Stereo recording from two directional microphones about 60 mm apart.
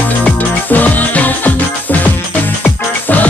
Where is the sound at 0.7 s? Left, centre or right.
Left.